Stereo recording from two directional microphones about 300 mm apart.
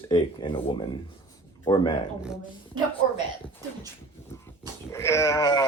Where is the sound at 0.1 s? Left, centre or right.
Centre.